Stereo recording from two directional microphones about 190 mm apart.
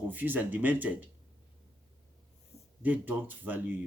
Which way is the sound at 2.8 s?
10° right (ahead or behind).